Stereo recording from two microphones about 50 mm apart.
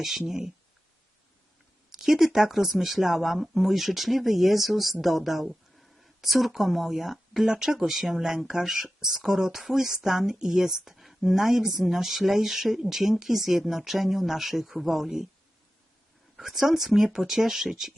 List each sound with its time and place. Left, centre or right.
0.0 s speech: centre
1.9 s speech: centre
16.4 s speech: centre